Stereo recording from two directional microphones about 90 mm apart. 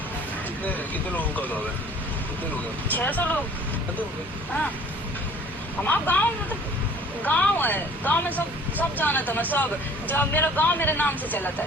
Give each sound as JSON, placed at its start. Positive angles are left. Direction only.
{"t": 0.6, "sound": "speech", "side_deg": 20}
{"t": 2.9, "sound": "speech", "side_deg": 20}
{"t": 5.8, "sound": "speech", "side_deg": 20}
{"t": 7.3, "sound": "speech", "side_deg": 20}